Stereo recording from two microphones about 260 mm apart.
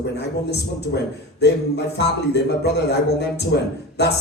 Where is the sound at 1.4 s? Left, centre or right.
Left.